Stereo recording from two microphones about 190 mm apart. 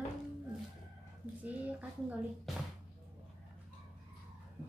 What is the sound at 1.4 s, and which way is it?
Speech, 5° right (ahead or behind).